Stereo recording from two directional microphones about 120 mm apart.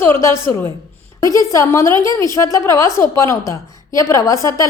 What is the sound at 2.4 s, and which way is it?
A woman's voice, 25° left (ahead or behind).